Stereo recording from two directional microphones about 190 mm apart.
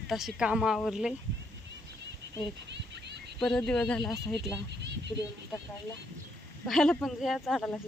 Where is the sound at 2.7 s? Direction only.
65° right (ahead or behind).